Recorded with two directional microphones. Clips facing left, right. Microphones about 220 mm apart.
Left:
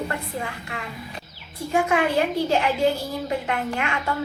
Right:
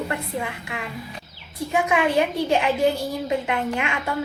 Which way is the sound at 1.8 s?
20° right (ahead or behind).